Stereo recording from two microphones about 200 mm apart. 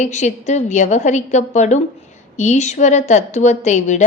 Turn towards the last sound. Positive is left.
turn(degrees=35)  # may be behind; listen again after turning